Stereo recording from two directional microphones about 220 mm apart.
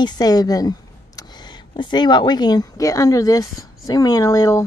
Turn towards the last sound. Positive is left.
turn(degrees=15)  # may be behind; listen again after turning